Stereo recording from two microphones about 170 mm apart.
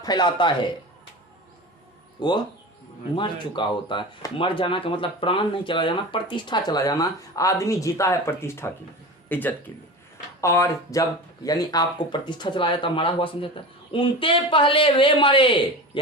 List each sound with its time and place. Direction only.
0.0 s speech: 25° left (ahead or behind)
2.2 s speech: 25° left (ahead or behind)